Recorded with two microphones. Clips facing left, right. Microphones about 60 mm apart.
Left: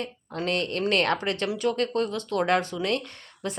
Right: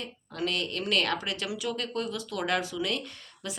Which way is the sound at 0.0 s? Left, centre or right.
Left.